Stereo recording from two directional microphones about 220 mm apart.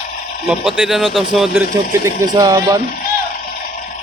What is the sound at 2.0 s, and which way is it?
Speech, 15° right (ahead or behind).